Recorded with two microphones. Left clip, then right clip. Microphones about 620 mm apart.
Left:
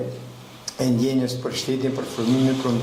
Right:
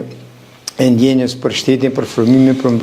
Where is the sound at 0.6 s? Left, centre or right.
Right.